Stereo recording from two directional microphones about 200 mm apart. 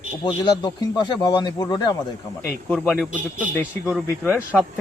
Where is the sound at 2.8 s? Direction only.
Centre (ahead or behind).